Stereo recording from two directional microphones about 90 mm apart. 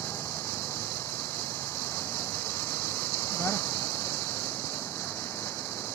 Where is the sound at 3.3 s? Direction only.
30° left (ahead or behind).